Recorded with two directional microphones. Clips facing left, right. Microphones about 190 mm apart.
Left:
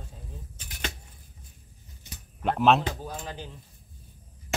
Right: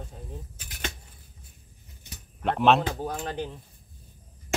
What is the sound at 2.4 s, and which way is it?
Speech, centre (ahead or behind).